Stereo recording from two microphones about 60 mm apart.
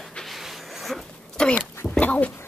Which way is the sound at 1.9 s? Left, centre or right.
Left.